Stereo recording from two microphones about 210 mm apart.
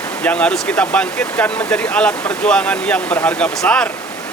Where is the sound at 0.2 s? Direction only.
5° left (ahead or behind).